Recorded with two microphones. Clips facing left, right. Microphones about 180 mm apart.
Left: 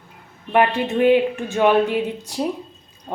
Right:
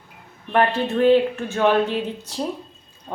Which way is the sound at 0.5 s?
10° left (ahead or behind).